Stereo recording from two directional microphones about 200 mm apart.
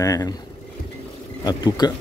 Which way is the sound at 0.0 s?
15° left (ahead or behind).